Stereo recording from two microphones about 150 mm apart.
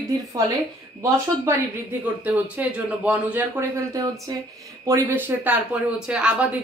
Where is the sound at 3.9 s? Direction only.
25° right (ahead or behind).